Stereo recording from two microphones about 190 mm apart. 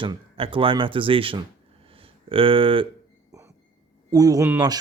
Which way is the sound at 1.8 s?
30° right (ahead or behind).